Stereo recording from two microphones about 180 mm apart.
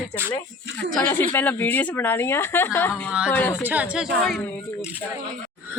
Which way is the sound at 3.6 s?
5° right (ahead or behind).